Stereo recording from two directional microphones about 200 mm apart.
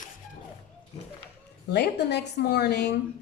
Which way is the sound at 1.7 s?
55° left (ahead or behind).